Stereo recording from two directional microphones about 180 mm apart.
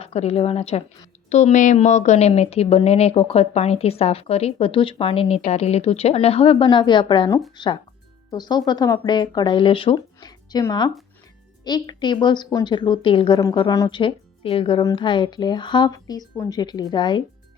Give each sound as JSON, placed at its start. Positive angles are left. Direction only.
{"t": 0.0, "sound": "a woman's voice", "side_deg": 35}